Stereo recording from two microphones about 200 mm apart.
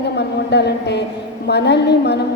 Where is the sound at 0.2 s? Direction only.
55° left (ahead or behind).